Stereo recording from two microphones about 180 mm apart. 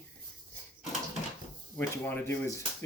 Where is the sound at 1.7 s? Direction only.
10° left (ahead or behind).